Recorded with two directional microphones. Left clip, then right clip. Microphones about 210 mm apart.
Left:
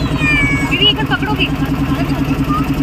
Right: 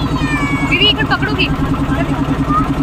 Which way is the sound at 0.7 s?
50° right (ahead or behind).